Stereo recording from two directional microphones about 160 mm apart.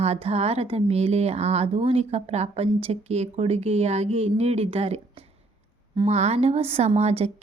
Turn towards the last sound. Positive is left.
turn(degrees=-40)  # may be behind; listen again after turning